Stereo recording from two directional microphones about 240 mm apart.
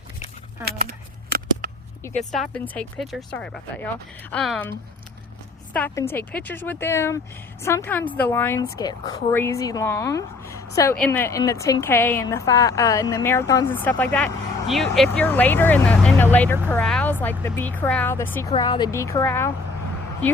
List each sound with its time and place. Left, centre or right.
0.7 s a sound: right
2.3 s speech: centre
5.7 s a woman's voice: centre